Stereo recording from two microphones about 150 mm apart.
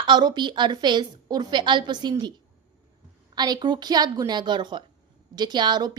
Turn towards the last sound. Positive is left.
turn(degrees=-30)  # may be behind; listen again after turning